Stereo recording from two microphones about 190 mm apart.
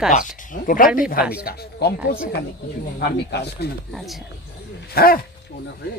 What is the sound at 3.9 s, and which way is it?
Speech, centre (ahead or behind).